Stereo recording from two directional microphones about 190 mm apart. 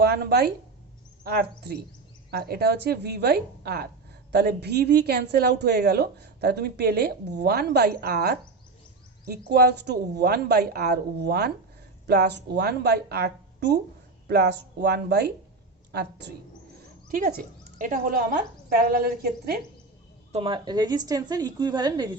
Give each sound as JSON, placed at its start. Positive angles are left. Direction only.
{"t": 0.0, "sound": "a woman's voice", "side_deg": -60}
{"t": 9.5, "sound": "a woman's voice", "side_deg": -60}
{"t": 17.1, "sound": "a woman's voice", "side_deg": -50}
{"t": 20.3, "sound": "a woman's voice", "side_deg": -25}